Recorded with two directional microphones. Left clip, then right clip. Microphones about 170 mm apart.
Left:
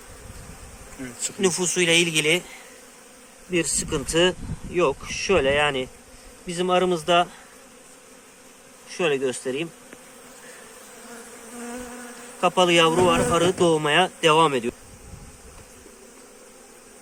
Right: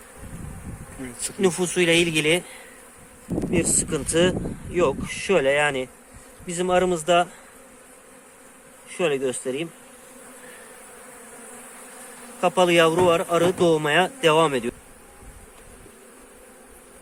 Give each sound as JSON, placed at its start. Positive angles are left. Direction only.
{"t": 1.4, "sound": "speech", "side_deg": -20}
{"t": 8.9, "sound": "speech", "side_deg": 0}
{"t": 12.4, "sound": "speech", "side_deg": 0}